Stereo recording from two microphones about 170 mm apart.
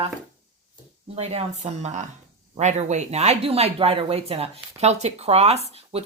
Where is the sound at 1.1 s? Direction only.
40° right (ahead or behind).